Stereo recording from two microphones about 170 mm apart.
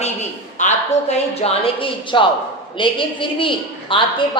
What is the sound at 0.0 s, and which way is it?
A woman's voice, 45° left (ahead or behind).